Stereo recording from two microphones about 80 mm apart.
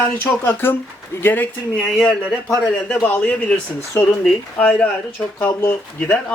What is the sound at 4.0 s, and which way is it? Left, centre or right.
Speech, left.